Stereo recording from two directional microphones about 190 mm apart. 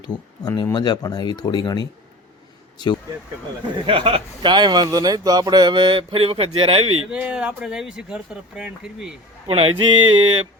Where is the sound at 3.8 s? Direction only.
30° right (ahead or behind).